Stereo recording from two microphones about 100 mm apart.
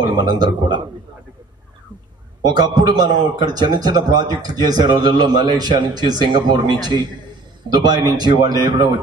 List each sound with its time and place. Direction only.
0.0 s a man's voice: 45° right (ahead or behind)
2.4 s a man's voice: 45° right (ahead or behind)